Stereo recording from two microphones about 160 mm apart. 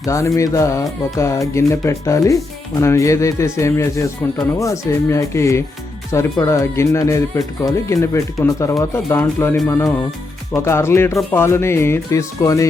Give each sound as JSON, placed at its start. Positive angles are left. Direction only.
{"t": 0.0, "sound": "speech", "side_deg": 20}